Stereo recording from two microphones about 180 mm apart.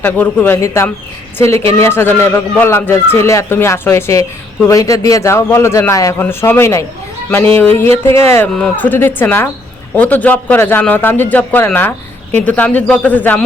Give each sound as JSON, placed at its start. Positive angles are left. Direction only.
{"t": 0.0, "sound": "a man's voice", "side_deg": 10}